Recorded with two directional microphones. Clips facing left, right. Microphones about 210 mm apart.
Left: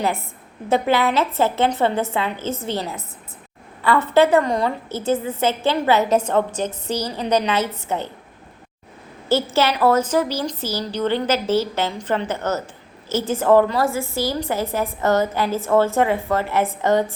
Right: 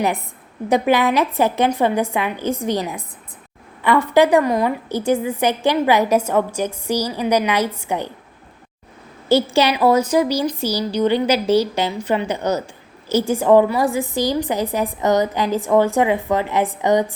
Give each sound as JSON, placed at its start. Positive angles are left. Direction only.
{"t": 0.0, "sound": "a woman's voice", "side_deg": -15}
{"t": 9.3, "sound": "a woman's voice", "side_deg": -15}